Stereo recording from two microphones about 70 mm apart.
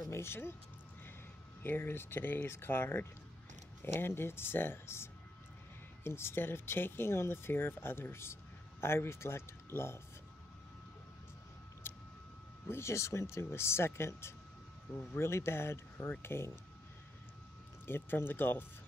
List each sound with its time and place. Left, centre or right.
0.1 s speech: left
1.6 s speech: left
11.8 s a sound: left
12.6 s speech: left
17.8 s speech: left